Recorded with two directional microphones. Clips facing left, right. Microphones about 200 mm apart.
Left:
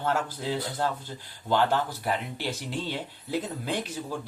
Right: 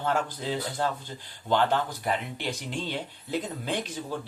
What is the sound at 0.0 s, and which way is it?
Speech, 5° left (ahead or behind).